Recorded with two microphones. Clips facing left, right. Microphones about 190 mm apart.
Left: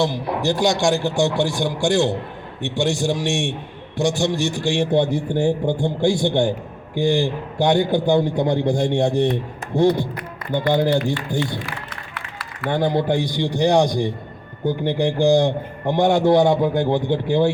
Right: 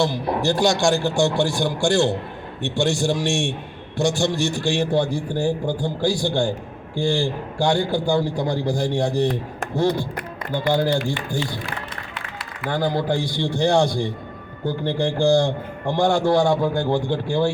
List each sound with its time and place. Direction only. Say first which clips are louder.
0.0 s a man's voice: even; 20° left (ahead or behind)
12.7 s a man's voice: left 3 dB; 20° left (ahead or behind)